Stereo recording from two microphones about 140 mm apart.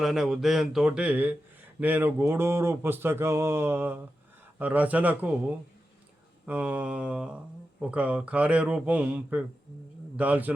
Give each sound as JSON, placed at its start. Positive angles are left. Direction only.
{"t": 0.0, "sound": "speech", "side_deg": -5}
{"t": 6.4, "sound": "speech", "side_deg": -10}